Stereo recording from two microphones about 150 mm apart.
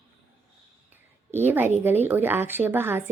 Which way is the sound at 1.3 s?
15° right (ahead or behind).